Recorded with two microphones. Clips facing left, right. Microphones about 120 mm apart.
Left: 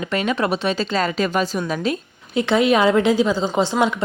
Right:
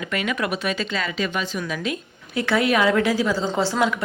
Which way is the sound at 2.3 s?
20° left (ahead or behind).